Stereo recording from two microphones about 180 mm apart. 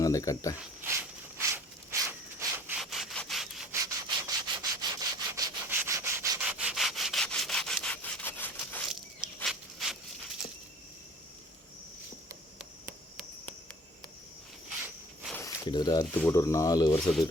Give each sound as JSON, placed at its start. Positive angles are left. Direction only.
{"t": 0.0, "sound": "speech", "side_deg": 20}
{"t": 1.4, "sound": "a sound", "side_deg": -15}
{"t": 2.6, "sound": "sawing", "side_deg": 0}
{"t": 3.7, "sound": "rub", "side_deg": -20}
{"t": 6.4, "sound": "rub", "side_deg": -5}
{"t": 8.9, "sound": "dog", "side_deg": 0}
{"t": 15.4, "sound": "a sound", "side_deg": 25}
{"t": 16.2, "sound": "speech", "side_deg": 15}
{"t": 17.0, "sound": "speech", "side_deg": 0}